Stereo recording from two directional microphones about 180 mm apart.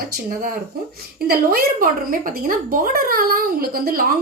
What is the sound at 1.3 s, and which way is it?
A woman's voice, 55° right (ahead or behind).